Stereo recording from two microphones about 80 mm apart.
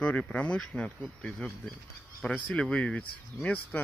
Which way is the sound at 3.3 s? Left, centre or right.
Left.